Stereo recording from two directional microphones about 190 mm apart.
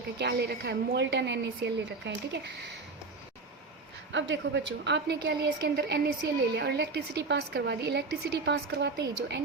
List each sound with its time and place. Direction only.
0.2 s a woman's voice: 60° right (ahead or behind)
4.1 s a woman's voice: 70° right (ahead or behind)